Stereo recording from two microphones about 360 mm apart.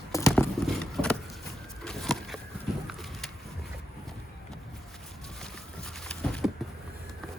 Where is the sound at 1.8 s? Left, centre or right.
Centre.